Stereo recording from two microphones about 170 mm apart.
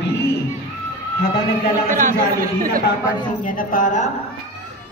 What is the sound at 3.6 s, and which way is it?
Speech, 55° left (ahead or behind).